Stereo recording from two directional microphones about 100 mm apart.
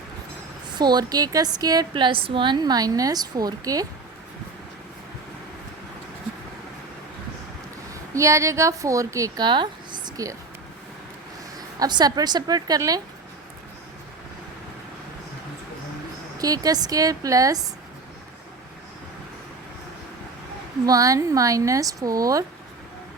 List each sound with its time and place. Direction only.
0.8 s a woman's voice: 45° right (ahead or behind)
1.9 s a woman's voice: 55° right (ahead or behind); by 3.8 s 35° right (ahead or behind)
8.1 s a woman's voice: 30° right (ahead or behind)
9.4 s a sound: 50° right (ahead or behind)
11.5 s a woman's voice: 40° right (ahead or behind)
16.4 s a woman's voice: 40° right (ahead or behind)
20.8 s a woman's voice: 35° right (ahead or behind)